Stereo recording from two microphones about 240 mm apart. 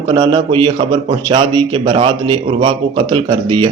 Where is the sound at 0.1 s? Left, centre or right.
Centre.